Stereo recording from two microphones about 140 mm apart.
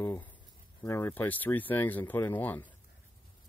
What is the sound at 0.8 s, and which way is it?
Speech, 15° left (ahead or behind).